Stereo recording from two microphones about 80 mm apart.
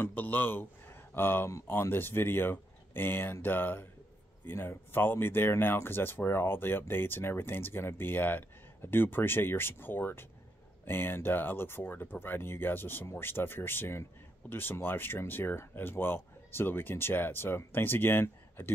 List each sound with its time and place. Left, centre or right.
0.0 s speech: left